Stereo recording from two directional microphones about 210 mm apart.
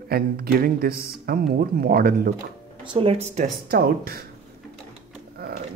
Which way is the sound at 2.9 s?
30° right (ahead or behind).